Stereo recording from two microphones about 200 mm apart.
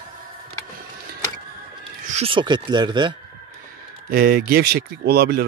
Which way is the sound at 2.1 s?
30° right (ahead or behind).